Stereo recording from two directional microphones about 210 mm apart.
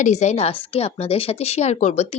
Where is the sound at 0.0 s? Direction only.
35° left (ahead or behind).